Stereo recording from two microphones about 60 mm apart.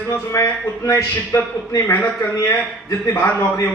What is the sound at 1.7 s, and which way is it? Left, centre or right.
A man's voice, left.